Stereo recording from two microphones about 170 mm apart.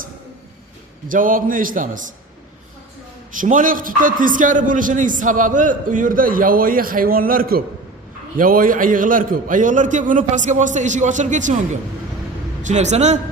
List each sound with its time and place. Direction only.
1.0 s a man's voice: 55° right (ahead or behind)
3.3 s a man's voice: 50° right (ahead or behind)